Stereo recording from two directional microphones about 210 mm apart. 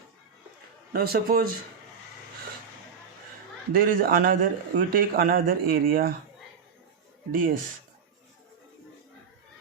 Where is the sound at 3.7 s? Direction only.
45° right (ahead or behind).